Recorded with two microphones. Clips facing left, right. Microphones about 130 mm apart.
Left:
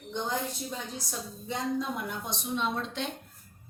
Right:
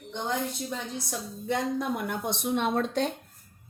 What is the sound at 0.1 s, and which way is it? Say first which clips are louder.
Speech: right 2 dB; 65° right (ahead or behind).